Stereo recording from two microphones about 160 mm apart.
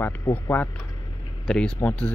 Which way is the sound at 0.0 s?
15° left (ahead or behind).